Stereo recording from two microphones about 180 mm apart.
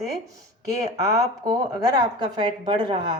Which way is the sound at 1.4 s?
20° right (ahead or behind).